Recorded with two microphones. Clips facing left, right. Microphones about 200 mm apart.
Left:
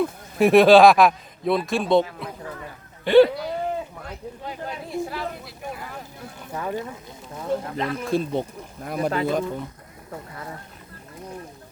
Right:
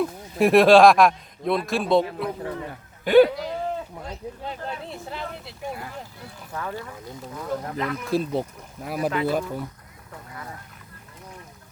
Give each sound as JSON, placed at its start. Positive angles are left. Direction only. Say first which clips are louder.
{"t": 0.0, "sound": "a man's voice", "louder": "left 1 dB", "side_deg": 0}
{"t": 4.9, "sound": "speech", "louder": "left 5 dB", "side_deg": -25}
{"t": 6.5, "sound": "speech", "louder": "left 4 dB", "side_deg": 20}
{"t": 7.5, "sound": "speech", "louder": "left 2 dB", "side_deg": 30}
{"t": 8.1, "sound": "a man's voice", "louder": "even", "side_deg": 0}